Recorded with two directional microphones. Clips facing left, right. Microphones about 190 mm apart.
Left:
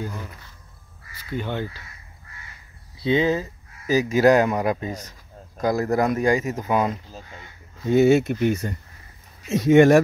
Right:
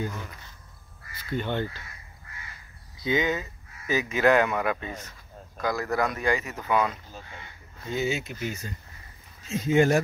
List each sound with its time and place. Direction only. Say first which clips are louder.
1.3 s speech: left 1 dB; 5° left (ahead or behind)
3.0 s speech: left 6 dB; 30° left (ahead or behind)
7.9 s speech: left 13 dB; 60° left (ahead or behind)
9.5 s speech: left 8 dB; 70° left (ahead or behind)